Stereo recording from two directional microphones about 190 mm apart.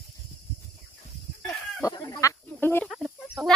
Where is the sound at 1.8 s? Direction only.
15° left (ahead or behind).